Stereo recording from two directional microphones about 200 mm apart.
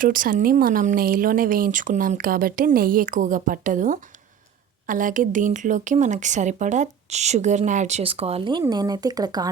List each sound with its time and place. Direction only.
0.0 s speech: 45° right (ahead or behind); by 9.5 s 20° right (ahead or behind)